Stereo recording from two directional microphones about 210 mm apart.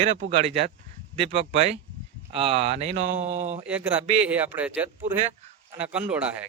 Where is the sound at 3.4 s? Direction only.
30° right (ahead or behind).